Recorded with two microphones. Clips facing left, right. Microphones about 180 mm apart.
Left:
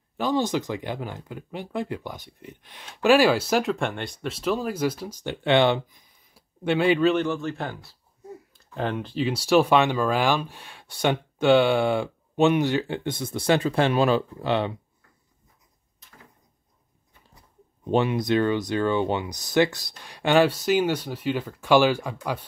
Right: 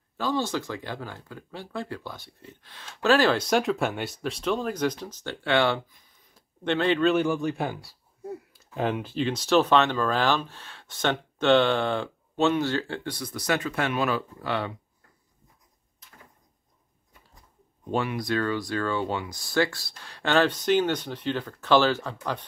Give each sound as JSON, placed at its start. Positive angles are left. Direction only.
{"t": 0.2, "sound": "speech", "side_deg": 15}
{"t": 6.3, "sound": "speech", "side_deg": 10}
{"t": 7.2, "sound": "speech", "side_deg": -15}
{"t": 9.2, "sound": "speech", "side_deg": 10}
{"t": 17.8, "sound": "speech", "side_deg": 20}